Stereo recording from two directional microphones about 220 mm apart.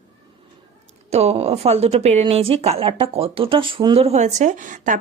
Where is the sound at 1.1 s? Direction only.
30° right (ahead or behind).